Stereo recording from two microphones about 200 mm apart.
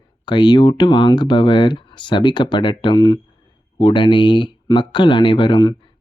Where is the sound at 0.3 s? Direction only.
20° left (ahead or behind).